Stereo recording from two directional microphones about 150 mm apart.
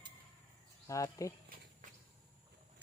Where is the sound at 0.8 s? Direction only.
20° left (ahead or behind).